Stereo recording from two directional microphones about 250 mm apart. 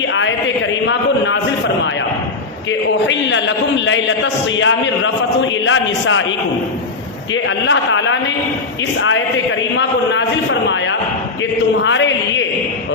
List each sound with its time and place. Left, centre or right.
0.1 s a man's voice: left
2.6 s a sound: left
4.5 s a man's voice: left
7.4 s a man's voice: left
11.8 s a man's voice: left